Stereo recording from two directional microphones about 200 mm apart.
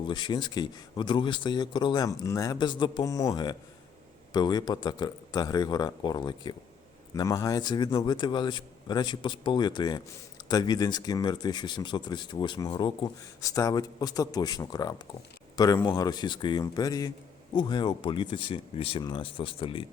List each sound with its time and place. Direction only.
0.1 s speech: 20° left (ahead or behind)